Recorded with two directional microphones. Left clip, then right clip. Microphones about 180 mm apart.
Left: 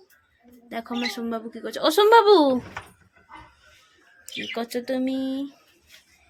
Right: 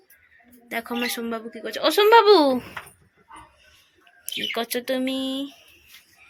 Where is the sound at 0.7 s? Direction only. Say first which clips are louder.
Right 2 dB; 5° left (ahead or behind).